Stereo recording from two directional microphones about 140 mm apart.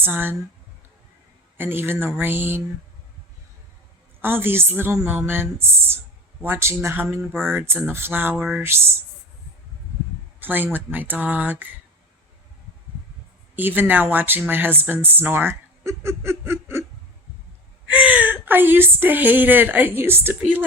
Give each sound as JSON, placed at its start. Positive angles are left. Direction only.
{"t": 0.0, "sound": "a woman's voice", "side_deg": -15}
{"t": 1.5, "sound": "a woman's voice", "side_deg": -15}
{"t": 4.2, "sound": "a woman's voice", "side_deg": -15}
{"t": 10.4, "sound": "a woman's voice", "side_deg": -15}
{"t": 13.6, "sound": "speech", "side_deg": -15}
{"t": 17.9, "sound": "a woman's voice", "side_deg": -10}